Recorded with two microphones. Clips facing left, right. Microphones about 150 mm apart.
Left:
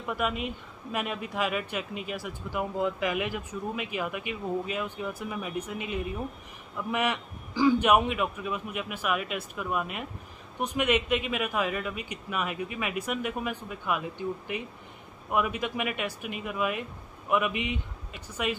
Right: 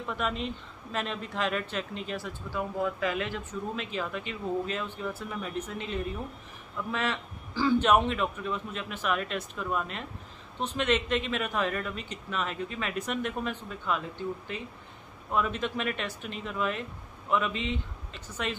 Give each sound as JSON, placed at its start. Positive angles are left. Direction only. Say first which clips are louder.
{"t": 0.0, "sound": "speech", "louder": "left 2 dB", "side_deg": 10}